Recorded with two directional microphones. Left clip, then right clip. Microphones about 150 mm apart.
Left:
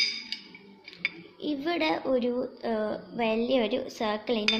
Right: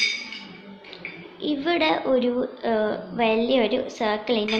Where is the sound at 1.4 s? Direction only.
35° left (ahead or behind).